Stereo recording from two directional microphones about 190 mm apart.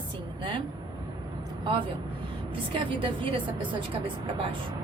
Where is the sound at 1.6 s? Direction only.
25° right (ahead or behind).